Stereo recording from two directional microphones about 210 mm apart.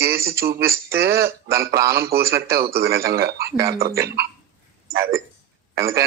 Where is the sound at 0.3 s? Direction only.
50° right (ahead or behind).